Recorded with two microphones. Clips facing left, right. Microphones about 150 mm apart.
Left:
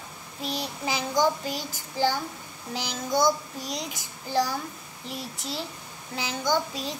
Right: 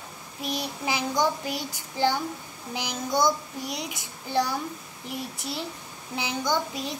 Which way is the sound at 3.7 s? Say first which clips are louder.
Even; 15° right (ahead or behind).